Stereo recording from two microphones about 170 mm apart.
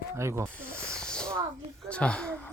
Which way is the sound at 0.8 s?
5° left (ahead or behind).